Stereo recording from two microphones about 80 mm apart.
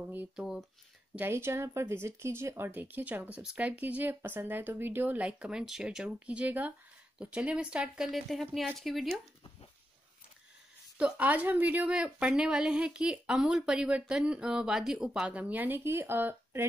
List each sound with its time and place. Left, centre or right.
0.4 s speech: centre
1.3 s a woman's voice: right; by 9.1 s centre
11.0 s a woman's voice: centre